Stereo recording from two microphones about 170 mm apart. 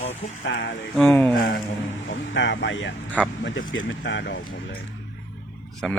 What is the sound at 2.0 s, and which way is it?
Speech, 90° left.